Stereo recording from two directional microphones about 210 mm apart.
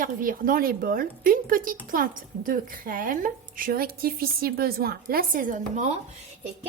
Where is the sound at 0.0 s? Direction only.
40° right (ahead or behind).